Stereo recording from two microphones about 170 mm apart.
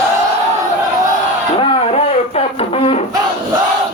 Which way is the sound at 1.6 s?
35° left (ahead or behind).